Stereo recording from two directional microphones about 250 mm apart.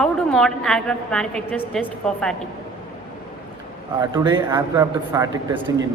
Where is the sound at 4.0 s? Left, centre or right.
Centre.